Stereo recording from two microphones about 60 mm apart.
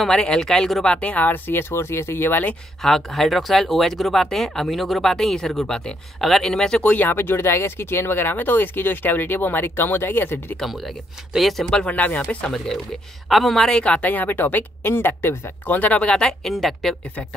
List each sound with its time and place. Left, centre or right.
0.0 s speech: centre
0.8 s speech: centre; by 2.5 s left
2.8 s speech: centre
6.8 s a woman's voice: left
7.1 s speech: left
10.6 s speech: centre
11.7 s a woman's voice: left
12.4 s a woman's voice: centre